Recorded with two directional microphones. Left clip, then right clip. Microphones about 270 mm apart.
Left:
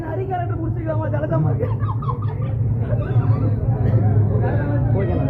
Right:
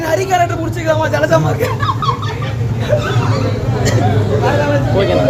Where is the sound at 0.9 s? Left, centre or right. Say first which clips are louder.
Right 12 dB; centre.